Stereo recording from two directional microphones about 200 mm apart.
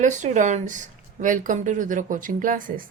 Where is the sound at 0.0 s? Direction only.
40° right (ahead or behind).